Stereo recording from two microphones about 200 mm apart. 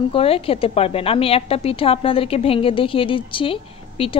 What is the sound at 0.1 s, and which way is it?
A woman's voice, 30° left (ahead or behind).